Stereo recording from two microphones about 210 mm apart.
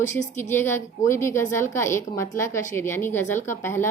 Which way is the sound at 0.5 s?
10° left (ahead or behind).